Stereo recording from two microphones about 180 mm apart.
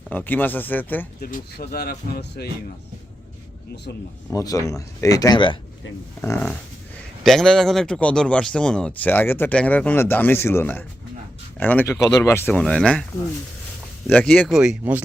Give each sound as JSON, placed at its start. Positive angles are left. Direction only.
{"t": 0.1, "sound": "speech", "side_deg": 10}
{"t": 1.2, "sound": "speech", "side_deg": 60}
{"t": 4.3, "sound": "speech", "side_deg": 20}
{"t": 6.2, "sound": "speech", "side_deg": 15}
{"t": 7.3, "sound": "speech", "side_deg": 0}
{"t": 14.1, "sound": "speech", "side_deg": 5}